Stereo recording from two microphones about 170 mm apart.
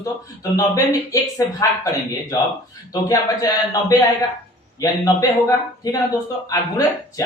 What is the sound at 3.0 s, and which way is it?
Speech, 20° left (ahead or behind).